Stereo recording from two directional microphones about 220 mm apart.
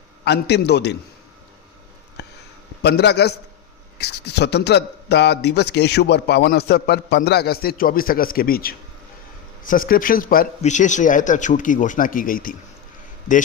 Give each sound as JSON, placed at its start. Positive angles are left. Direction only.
{"t": 0.3, "sound": "a man's voice", "side_deg": 50}
{"t": 2.2, "sound": "a sound", "side_deg": 50}
{"t": 2.8, "sound": "a man's voice", "side_deg": 50}